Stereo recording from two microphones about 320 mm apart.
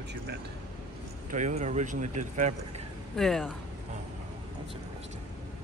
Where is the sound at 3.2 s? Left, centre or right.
Centre.